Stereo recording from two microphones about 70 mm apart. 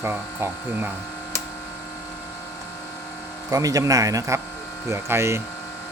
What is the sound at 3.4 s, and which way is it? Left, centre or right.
Speech, right.